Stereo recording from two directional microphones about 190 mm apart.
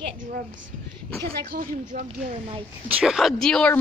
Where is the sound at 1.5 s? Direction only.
50° right (ahead or behind).